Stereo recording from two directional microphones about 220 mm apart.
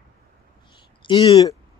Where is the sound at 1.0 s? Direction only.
20° left (ahead or behind).